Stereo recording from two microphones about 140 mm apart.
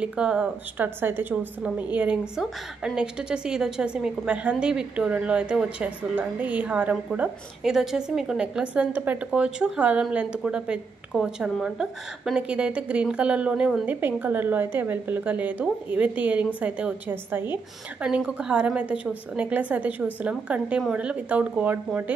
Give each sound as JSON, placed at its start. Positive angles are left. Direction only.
{"t": 0.0, "sound": "a woman's voice", "side_deg": -5}